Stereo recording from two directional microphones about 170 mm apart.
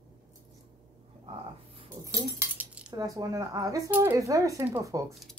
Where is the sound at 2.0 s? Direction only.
15° right (ahead or behind).